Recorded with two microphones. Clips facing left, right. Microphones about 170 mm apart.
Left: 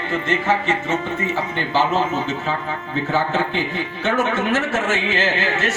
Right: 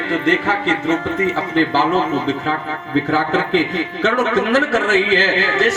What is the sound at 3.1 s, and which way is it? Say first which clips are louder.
Speech: right 2 dB; 90° right.